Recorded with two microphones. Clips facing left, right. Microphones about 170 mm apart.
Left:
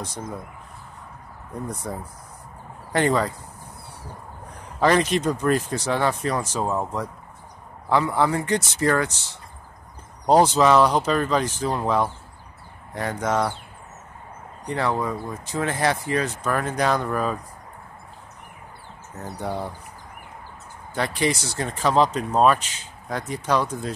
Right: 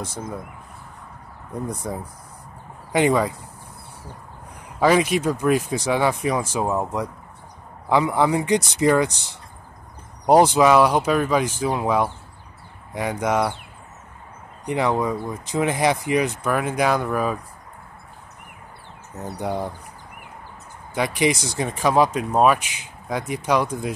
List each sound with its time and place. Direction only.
1.7 s speech: 15° right (ahead or behind)
4.7 s speech: 10° right (ahead or behind)
14.7 s speech: 15° right (ahead or behind)
19.4 s speech: 15° right (ahead or behind)
20.9 s speech: 15° right (ahead or behind)